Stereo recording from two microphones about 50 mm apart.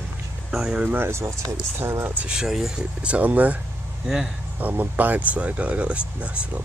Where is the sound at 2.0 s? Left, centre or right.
Right.